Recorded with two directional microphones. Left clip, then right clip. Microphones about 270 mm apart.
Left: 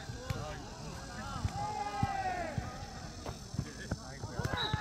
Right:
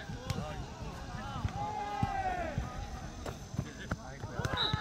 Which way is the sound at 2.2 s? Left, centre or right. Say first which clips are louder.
Right 1 dB; centre.